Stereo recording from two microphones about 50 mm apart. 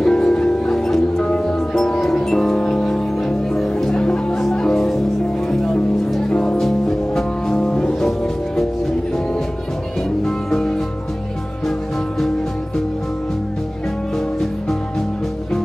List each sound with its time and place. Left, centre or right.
0.0 s music: centre
10.0 s music: centre
14.1 s music: centre